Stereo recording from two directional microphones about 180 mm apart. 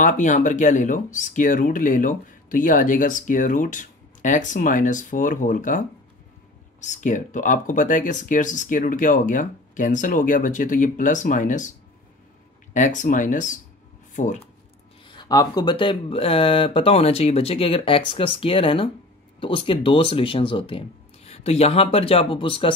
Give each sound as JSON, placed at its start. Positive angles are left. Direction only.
{"t": 0.0, "sound": "speech", "side_deg": 45}
{"t": 12.7, "sound": "speech", "side_deg": 45}
{"t": 15.0, "sound": "speech", "side_deg": 25}